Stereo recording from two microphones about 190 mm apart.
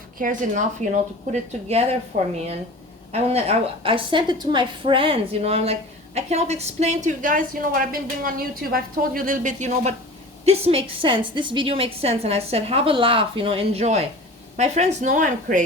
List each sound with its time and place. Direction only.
0.2 s a woman's voice: 45° right (ahead or behind)